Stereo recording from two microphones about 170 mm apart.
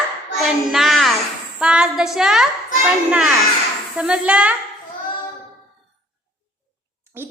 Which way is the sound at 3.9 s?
5° right (ahead or behind).